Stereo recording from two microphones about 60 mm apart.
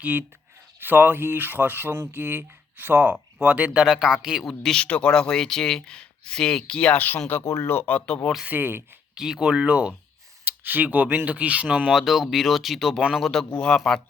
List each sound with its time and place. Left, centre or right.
0.0 s speech: right
3.8 s a man's voice: centre
4.7 s speech: left
7.4 s speech: left
8.4 s speech: right
9.1 s a man's voice: centre
10.6 s speech: right
11.9 s speech: centre